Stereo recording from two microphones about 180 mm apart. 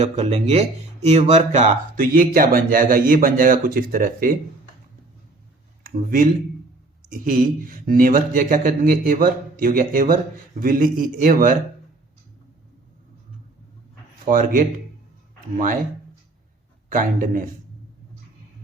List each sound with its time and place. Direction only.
0.0 s speech: 35° right (ahead or behind)
5.8 s speech: 50° right (ahead or behind)
14.3 s speech: 50° right (ahead or behind)
16.9 s speech: 50° right (ahead or behind)